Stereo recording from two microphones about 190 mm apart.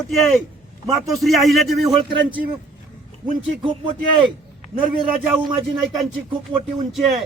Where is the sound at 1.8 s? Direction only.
25° right (ahead or behind).